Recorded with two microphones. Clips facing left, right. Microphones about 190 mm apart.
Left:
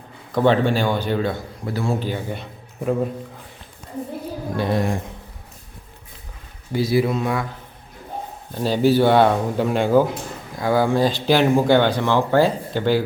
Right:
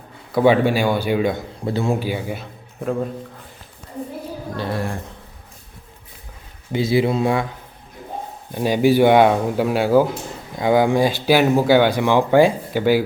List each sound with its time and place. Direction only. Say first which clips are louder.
0.3 s speech: right 2 dB; 10° right (ahead or behind)
2.0 s a man's voice: right 2 dB; 10° right (ahead or behind)
4.5 s speech: left 4 dB; 15° left (ahead or behind)
6.7 s speech: right 1 dB; 25° right (ahead or behind)
8.5 s speech: right 2 dB; 15° right (ahead or behind)
10.5 s speech: right 3 dB; 20° right (ahead or behind)